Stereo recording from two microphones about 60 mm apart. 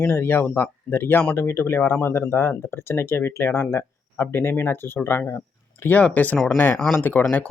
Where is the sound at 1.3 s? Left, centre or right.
Left.